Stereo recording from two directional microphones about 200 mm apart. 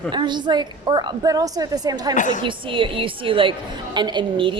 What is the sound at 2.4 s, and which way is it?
A woman's voice, 25° right (ahead or behind).